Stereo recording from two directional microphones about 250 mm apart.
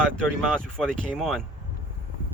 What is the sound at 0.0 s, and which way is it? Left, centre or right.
Speech, centre.